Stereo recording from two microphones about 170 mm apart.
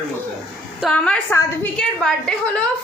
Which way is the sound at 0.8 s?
5° left (ahead or behind).